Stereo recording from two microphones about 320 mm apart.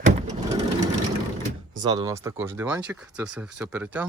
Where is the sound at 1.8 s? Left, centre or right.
Centre.